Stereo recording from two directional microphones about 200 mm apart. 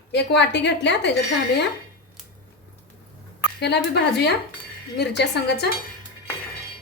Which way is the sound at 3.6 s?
55° left (ahead or behind).